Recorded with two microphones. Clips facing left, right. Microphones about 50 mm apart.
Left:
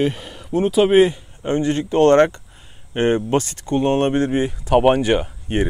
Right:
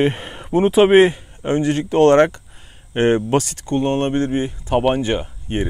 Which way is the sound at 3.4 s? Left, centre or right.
Centre.